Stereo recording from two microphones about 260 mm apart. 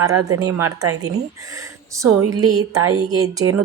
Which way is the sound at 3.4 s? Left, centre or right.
Centre.